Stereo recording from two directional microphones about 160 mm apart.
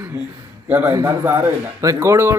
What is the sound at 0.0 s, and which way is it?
A man's voice, 15° right (ahead or behind).